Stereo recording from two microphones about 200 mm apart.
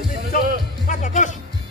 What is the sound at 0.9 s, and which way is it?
Music, 40° left (ahead or behind).